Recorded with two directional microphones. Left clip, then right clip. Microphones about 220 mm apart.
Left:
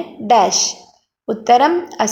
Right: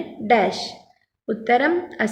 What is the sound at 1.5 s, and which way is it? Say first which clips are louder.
Speech: left 6 dB; 5° left (ahead or behind).